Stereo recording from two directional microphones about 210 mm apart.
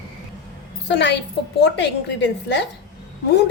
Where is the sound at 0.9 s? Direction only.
55° left (ahead or behind).